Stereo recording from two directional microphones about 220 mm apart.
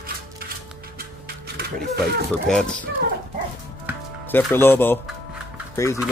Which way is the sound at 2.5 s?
5° left (ahead or behind).